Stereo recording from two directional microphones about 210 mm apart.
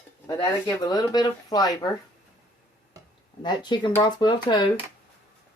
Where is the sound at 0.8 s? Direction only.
20° left (ahead or behind).